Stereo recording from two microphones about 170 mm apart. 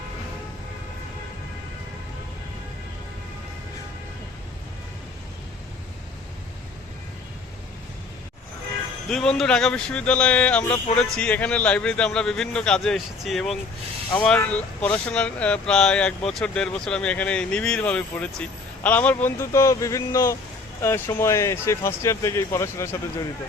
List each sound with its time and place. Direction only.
9.0 s a man's voice: 5° left (ahead or behind)